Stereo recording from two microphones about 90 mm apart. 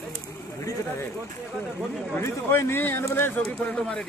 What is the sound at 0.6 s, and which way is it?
Speech, 35° left (ahead or behind).